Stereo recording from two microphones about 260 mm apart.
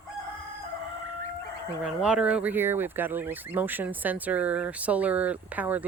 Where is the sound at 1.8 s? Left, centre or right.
Centre.